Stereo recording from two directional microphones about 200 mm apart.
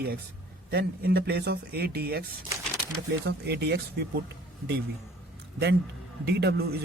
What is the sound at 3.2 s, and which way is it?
Speech, 55° right (ahead or behind).